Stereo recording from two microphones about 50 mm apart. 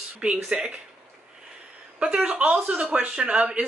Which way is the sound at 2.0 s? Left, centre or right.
Centre.